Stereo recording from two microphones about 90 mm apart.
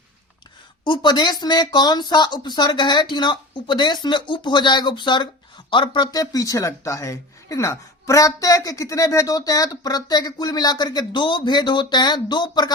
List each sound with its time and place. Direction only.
0.9 s speech: 55° left (ahead or behind)